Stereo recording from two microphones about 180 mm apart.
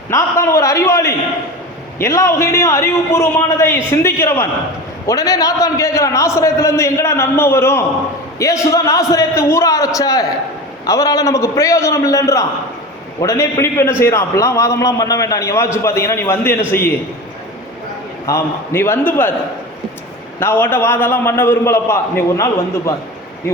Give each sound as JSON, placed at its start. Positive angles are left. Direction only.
{"t": 0.1, "sound": "a man's voice", "side_deg": 15}
{"t": 18.3, "sound": "a man's voice", "side_deg": 15}
{"t": 20.4, "sound": "a man's voice", "side_deg": 10}